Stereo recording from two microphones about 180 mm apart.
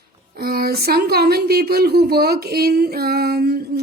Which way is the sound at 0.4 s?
55° right (ahead or behind).